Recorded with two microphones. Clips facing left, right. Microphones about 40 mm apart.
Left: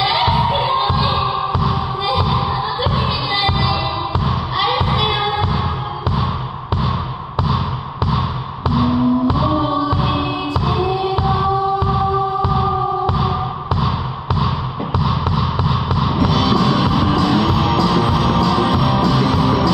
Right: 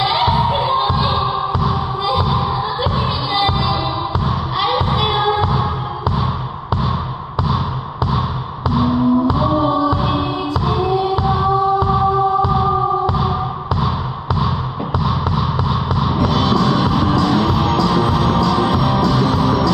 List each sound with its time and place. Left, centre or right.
0.2 s music: left
4.6 s music: centre
4.8 s heart murmur: left
8.6 s a sound: left
9.8 s music: left
13.0 s music: left
15.0 s a sound: left
16.2 s music: left